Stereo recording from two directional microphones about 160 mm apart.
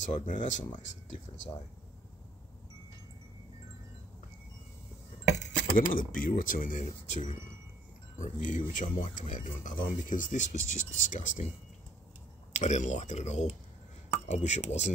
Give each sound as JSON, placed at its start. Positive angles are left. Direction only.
{"t": 0.0, "sound": "speech", "side_deg": 50}
{"t": 5.4, "sound": "speech", "side_deg": 60}
{"t": 12.5, "sound": "speech", "side_deg": 45}